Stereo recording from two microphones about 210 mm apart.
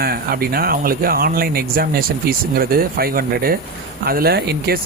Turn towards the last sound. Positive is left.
turn(degrees=-50)  # may be behind; listen again after turning